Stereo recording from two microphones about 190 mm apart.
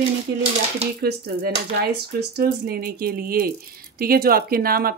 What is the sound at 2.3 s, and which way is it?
Speech, 55° right (ahead or behind).